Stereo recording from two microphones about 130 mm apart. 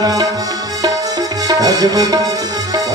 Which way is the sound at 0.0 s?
30° right (ahead or behind).